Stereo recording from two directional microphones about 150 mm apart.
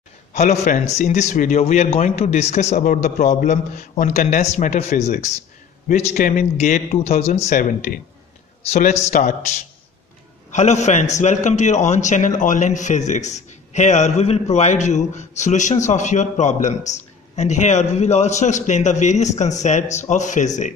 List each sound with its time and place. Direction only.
0.3 s a man's voice: 50° left (ahead or behind)
7.4 s speech: 65° left (ahead or behind)
9.1 s speech: 65° left (ahead or behind)
10.5 s a man's voice: 50° left (ahead or behind)